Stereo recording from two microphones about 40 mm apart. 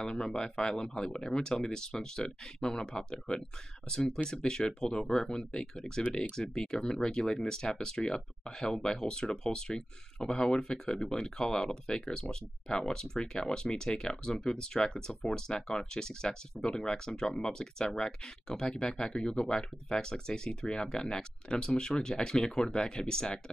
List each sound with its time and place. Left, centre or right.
0.0 s speech: centre